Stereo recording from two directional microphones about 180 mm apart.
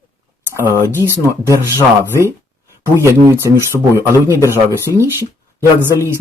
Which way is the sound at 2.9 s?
15° right (ahead or behind).